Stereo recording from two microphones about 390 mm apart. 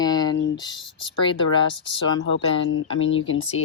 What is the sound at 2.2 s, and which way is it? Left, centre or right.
Speech, left.